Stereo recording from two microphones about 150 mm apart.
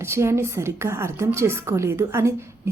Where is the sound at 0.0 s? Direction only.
20° right (ahead or behind).